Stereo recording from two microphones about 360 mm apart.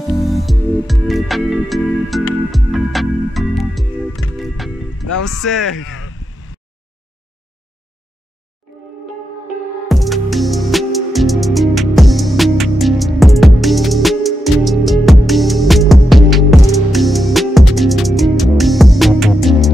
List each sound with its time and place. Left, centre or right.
0.2 s music: centre
4.4 s speech: centre
5.8 s speech: left
8.6 s music: centre
9.8 s music: centre